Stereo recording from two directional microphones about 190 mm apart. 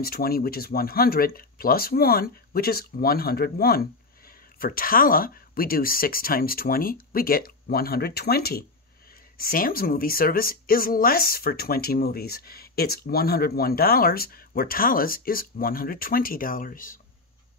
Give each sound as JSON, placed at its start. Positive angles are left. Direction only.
{"t": 0.0, "sound": "speech", "side_deg": 55}